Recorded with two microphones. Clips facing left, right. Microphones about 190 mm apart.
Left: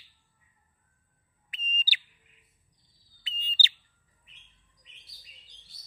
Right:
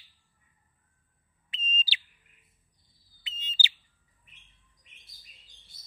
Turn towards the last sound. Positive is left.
turn(degrees=-50)  # may be behind; listen again after turning